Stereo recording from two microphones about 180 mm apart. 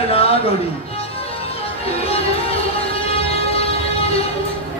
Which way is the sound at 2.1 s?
30° left (ahead or behind).